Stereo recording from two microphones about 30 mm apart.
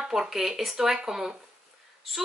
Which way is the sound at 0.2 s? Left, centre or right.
Centre.